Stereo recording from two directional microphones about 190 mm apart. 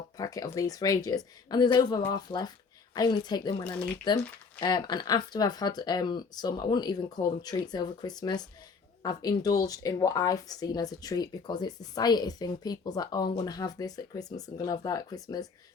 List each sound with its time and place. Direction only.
0.2 s speech: 20° left (ahead or behind)